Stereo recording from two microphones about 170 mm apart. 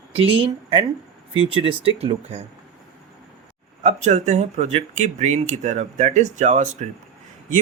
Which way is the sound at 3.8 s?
40° right (ahead or behind).